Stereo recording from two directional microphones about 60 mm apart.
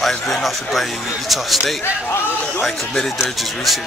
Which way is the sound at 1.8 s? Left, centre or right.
Left.